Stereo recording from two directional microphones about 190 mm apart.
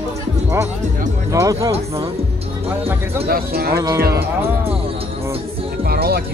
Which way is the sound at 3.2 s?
50° right (ahead or behind).